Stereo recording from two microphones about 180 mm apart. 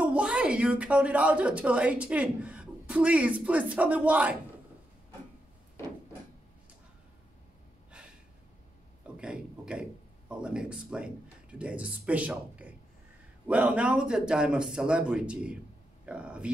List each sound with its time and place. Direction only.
0.0 s a woman's voice: 5° right (ahead or behind)
9.0 s a man's voice: 5° right (ahead or behind)